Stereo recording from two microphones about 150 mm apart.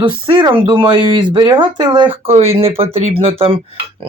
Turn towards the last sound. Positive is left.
turn(degrees=-40)  # may be behind; listen again after turning